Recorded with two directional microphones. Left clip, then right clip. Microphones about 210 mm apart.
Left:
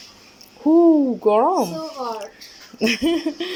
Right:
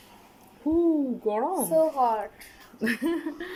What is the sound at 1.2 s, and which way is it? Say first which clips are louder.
Speech: left 12 dB; 5° left (ahead or behind).